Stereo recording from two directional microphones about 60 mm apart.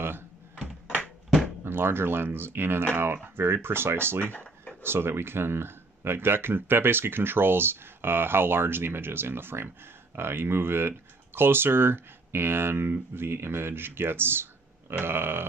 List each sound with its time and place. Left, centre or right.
1.6 s speech: right
4.3 s a sound: left
4.8 s speech: right